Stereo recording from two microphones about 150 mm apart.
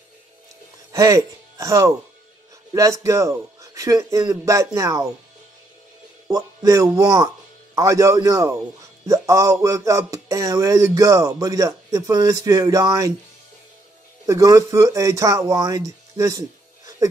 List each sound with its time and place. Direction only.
0.9 s a man's voice: 20° right (ahead or behind)
6.2 s a man's voice: 20° right (ahead or behind)
14.2 s speech: 20° right (ahead or behind)